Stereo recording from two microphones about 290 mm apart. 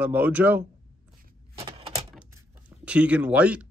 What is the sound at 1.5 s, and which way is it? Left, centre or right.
Door, centre.